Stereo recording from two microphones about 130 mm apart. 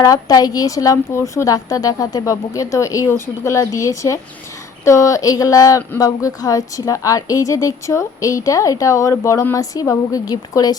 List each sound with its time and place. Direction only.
0.0 s speech: 25° left (ahead or behind)